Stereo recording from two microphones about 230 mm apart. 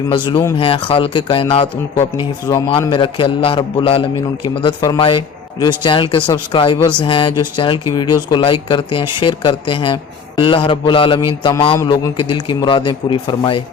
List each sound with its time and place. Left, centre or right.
0.1 s a man's voice: left